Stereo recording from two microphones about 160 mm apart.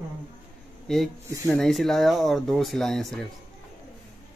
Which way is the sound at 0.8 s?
Centre (ahead or behind).